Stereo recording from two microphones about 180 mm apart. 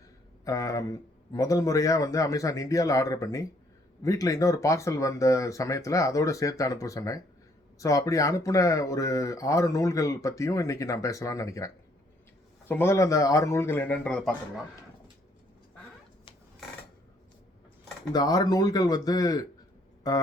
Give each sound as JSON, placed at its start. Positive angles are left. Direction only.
{"t": 0.4, "sound": "speech", "side_deg": 20}
{"t": 18.1, "sound": "speech", "side_deg": 20}